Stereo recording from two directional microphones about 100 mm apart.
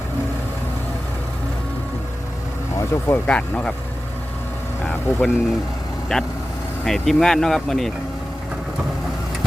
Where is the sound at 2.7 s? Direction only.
25° left (ahead or behind).